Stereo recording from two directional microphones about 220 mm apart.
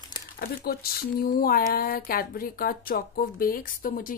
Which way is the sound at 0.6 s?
45° left (ahead or behind).